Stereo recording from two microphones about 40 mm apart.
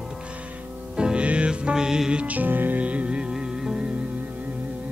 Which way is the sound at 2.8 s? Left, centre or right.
Right.